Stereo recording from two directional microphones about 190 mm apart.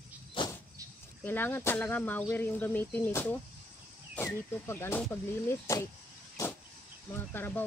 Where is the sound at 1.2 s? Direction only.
10° left (ahead or behind).